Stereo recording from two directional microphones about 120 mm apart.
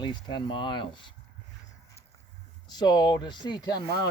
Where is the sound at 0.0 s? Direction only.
40° left (ahead or behind).